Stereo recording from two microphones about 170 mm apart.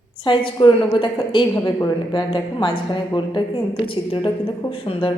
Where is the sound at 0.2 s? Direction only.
30° left (ahead or behind).